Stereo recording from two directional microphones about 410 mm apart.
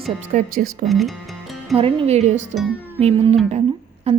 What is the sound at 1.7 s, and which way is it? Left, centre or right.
Speech, centre.